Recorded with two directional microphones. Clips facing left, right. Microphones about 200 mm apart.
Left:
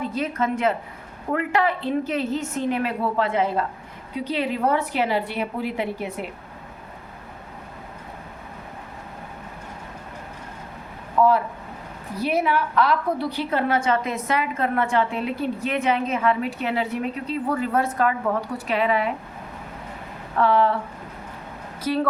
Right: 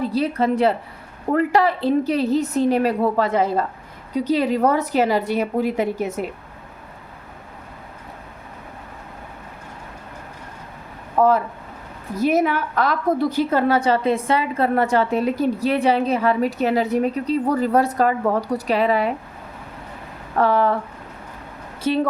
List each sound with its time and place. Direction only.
0.0 s a woman's voice: 35° right (ahead or behind)
11.2 s a woman's voice: 45° right (ahead or behind)
20.4 s speech: 45° right (ahead or behind)
21.8 s speech: 25° right (ahead or behind)